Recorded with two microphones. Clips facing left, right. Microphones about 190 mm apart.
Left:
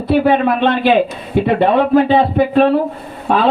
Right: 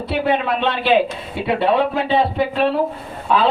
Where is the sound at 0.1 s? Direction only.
50° left (ahead or behind).